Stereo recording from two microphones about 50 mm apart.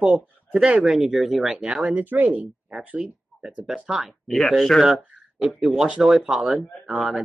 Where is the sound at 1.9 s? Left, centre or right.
Right.